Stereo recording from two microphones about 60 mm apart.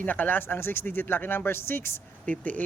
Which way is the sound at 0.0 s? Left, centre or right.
Left.